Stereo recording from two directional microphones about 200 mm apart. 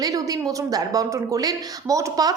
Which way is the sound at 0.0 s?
20° right (ahead or behind).